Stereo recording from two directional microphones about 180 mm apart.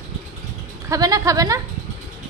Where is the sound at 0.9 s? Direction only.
20° right (ahead or behind).